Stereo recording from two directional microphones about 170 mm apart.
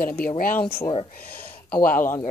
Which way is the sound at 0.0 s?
60° left (ahead or behind).